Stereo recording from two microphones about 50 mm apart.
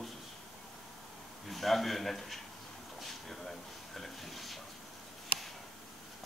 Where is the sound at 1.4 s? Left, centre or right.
Centre.